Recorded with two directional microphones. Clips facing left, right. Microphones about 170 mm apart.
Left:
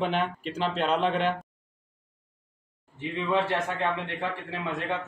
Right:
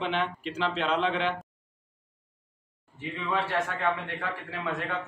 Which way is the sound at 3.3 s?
20° left (ahead or behind).